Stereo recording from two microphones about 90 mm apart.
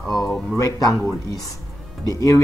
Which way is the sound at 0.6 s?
40° left (ahead or behind).